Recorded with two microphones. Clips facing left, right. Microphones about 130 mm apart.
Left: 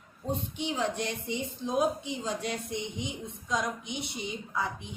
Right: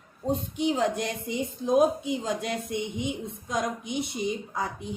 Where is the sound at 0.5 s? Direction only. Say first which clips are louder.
Right 7 dB; 45° right (ahead or behind).